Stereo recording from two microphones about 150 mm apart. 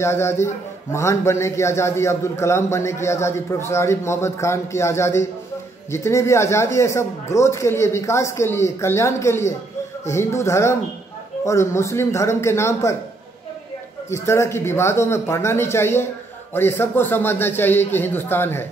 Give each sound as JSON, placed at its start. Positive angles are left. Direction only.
{"t": 0.0, "sound": "a man's voice", "side_deg": 15}
{"t": 14.1, "sound": "a man's voice", "side_deg": 20}